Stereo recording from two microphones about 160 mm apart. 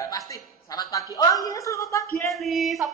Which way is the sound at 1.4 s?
20° left (ahead or behind).